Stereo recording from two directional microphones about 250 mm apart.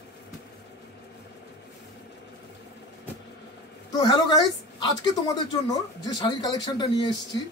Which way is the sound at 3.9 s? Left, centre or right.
Centre.